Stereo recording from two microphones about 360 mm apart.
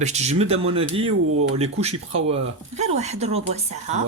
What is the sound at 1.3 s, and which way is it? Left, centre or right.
Speech, right.